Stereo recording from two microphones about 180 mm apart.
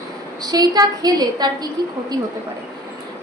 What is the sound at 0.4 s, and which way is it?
A woman's voice, 20° right (ahead or behind).